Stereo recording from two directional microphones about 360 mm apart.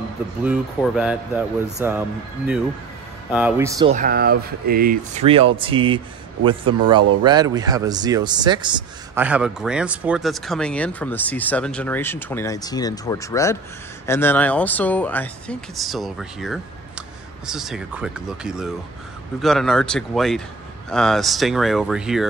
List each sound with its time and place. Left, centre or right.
0.4 s speech: centre
3.9 s speech: right
7.2 s speech: centre